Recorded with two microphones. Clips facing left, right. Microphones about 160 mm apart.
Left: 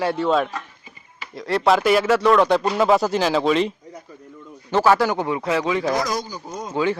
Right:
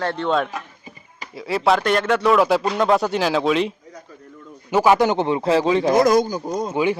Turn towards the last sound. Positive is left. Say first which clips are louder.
# right 1 dB
turn(degrees=-15)  # may be behind; listen again after turning